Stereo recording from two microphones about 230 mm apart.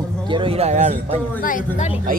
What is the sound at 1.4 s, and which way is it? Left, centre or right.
Speech, left.